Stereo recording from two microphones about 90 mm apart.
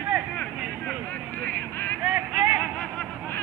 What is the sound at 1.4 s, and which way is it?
Vehicle, 20° left (ahead or behind).